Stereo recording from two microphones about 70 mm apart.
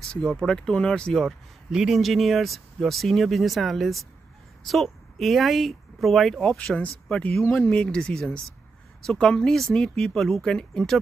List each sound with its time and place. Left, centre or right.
0.1 s speech: centre
1.7 s speech: centre
6.4 s speech: centre
7.3 s speech: centre